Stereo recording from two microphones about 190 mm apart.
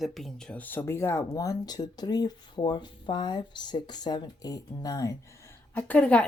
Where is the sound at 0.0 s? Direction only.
Centre (ahead or behind).